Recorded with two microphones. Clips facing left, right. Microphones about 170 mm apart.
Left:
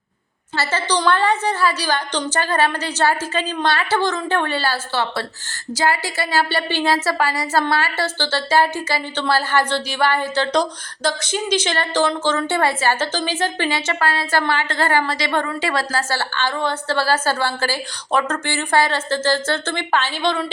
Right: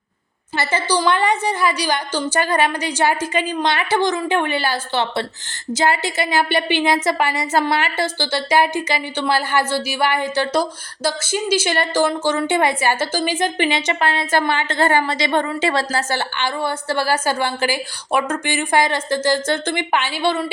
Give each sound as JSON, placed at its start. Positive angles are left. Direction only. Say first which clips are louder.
{"t": 0.5, "sound": "a woman's voice", "louder": "right 1 dB", "side_deg": -15}